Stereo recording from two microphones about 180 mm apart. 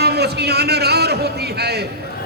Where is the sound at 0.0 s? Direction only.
65° right (ahead or behind).